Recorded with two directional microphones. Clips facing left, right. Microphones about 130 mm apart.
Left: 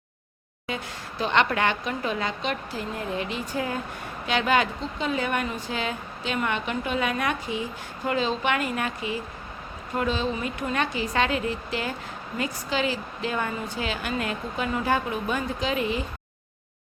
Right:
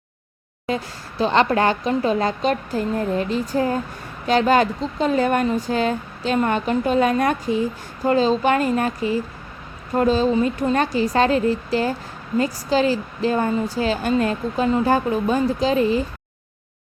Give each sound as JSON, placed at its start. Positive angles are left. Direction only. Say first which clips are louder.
{"t": 1.2, "sound": "a woman's voice", "louder": "right 6 dB", "side_deg": -35}